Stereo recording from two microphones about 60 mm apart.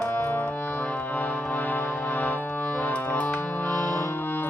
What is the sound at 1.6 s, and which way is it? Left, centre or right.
Music, left.